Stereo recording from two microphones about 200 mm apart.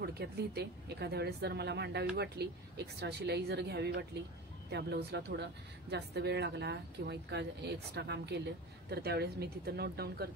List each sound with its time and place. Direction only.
0.0 s speech: 55° right (ahead or behind)